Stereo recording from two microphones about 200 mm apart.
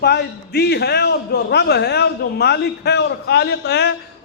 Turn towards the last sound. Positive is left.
turn(degrees=55)  # may be behind; listen again after turning